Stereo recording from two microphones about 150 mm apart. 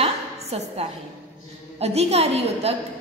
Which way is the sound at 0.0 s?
45° right (ahead or behind).